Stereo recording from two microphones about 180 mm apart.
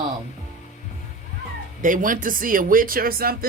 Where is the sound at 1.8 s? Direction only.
45° right (ahead or behind).